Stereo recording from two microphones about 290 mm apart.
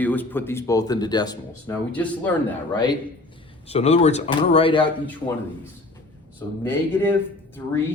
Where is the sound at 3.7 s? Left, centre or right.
Left.